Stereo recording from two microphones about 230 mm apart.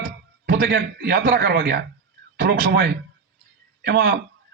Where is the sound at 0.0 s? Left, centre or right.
Right.